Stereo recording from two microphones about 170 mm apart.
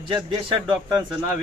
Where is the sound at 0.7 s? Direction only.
25° right (ahead or behind).